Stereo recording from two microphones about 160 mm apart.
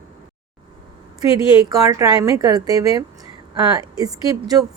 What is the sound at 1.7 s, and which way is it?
Speech, 20° right (ahead or behind).